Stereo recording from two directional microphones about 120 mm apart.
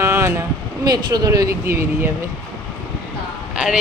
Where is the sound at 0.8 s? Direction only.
35° right (ahead or behind).